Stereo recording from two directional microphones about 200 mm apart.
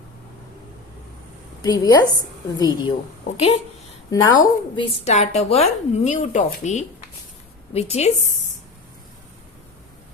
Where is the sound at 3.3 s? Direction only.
30° left (ahead or behind).